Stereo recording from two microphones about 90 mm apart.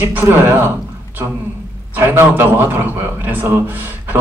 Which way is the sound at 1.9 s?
25° right (ahead or behind).